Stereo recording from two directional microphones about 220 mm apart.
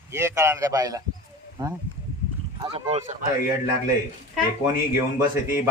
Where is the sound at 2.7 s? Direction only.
30° right (ahead or behind).